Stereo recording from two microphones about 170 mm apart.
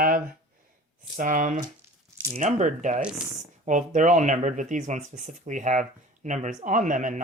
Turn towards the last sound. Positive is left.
turn(degrees=-50)  # may be behind; listen again after turning